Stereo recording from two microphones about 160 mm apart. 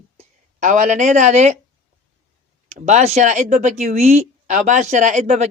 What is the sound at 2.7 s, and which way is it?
Speech, 45° right (ahead or behind).